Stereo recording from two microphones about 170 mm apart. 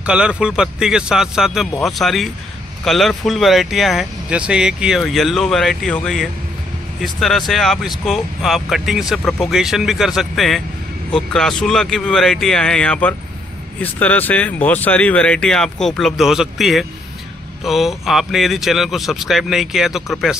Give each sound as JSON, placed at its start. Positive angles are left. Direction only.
{"t": 0.0, "sound": "speech", "side_deg": -5}